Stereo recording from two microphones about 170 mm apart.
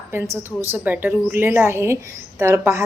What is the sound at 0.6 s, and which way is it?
A woman's voice, 10° right (ahead or behind).